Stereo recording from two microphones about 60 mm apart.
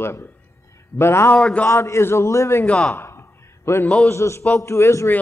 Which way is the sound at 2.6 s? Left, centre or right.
Centre.